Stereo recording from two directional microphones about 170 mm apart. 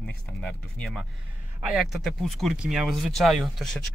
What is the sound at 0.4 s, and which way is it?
Speech, 5° left (ahead or behind).